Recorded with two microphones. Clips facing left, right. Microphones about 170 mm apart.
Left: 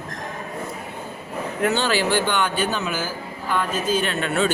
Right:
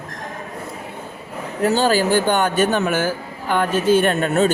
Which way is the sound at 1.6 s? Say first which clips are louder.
Right 5 dB; 40° right (ahead or behind).